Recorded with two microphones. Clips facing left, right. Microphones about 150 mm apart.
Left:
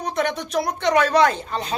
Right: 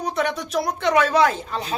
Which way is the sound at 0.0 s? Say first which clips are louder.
Even; centre (ahead or behind).